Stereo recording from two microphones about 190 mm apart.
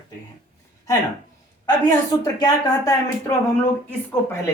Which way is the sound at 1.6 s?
15° left (ahead or behind).